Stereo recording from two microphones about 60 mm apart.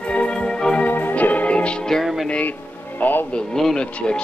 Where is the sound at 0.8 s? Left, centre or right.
Left.